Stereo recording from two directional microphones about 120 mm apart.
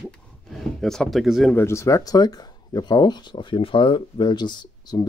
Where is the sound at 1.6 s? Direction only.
25° left (ahead or behind).